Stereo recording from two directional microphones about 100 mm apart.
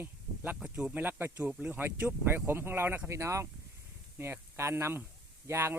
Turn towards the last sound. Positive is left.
turn(degrees=-25)  # may be behind; listen again after turning